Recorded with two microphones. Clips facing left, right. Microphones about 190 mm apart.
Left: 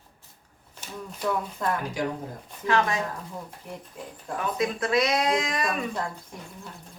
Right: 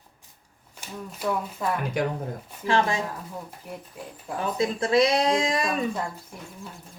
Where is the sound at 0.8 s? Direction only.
5° right (ahead or behind).